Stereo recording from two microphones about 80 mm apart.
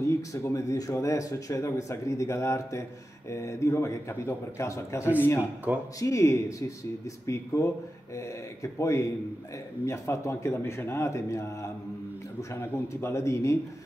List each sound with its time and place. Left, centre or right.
0.0 s speech: left
8.7 s speech: left